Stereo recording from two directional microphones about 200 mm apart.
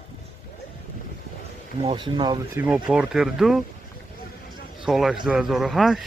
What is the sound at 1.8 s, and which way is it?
Speech, 25° right (ahead or behind).